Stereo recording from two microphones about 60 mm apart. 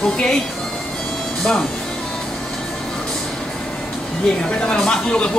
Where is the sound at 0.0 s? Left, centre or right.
Centre.